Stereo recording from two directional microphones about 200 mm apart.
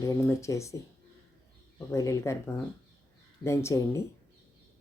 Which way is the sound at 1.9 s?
15° left (ahead or behind).